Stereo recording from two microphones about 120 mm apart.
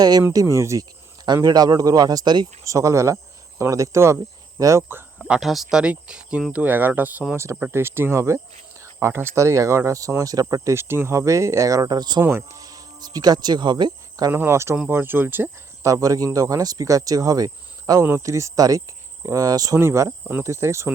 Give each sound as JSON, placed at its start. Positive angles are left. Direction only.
{"t": 0.0, "sound": "speech", "side_deg": -35}
{"t": 5.2, "sound": "speech", "side_deg": 0}
{"t": 12.2, "sound": "speech", "side_deg": -20}
{"t": 14.3, "sound": "speech", "side_deg": -20}